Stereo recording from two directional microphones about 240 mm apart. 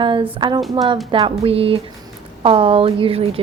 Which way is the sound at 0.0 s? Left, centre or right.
Right.